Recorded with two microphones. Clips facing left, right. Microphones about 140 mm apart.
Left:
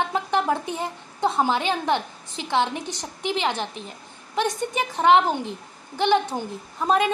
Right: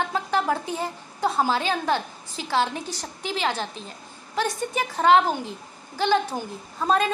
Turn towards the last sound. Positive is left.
turn(degrees=15)  # may be behind; listen again after turning